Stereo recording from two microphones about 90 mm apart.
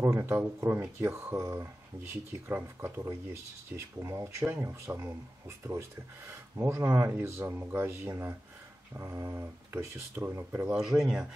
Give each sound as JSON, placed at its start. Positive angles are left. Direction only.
{"t": 0.0, "sound": "speech", "side_deg": -25}
{"t": 10.7, "sound": "speech", "side_deg": -5}